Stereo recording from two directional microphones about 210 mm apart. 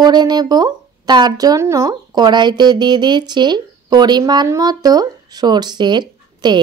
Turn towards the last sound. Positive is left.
turn(degrees=-20)  # may be behind; listen again after turning